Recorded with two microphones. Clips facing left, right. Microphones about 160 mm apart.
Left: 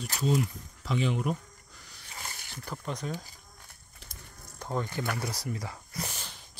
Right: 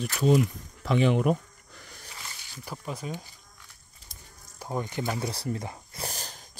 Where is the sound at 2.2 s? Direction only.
50° left (ahead or behind).